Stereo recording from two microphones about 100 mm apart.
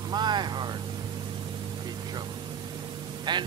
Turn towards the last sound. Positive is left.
turn(degrees=-50)  # may be behind; listen again after turning